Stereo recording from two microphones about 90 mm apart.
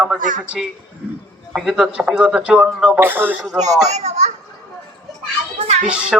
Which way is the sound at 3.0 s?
25° right (ahead or behind).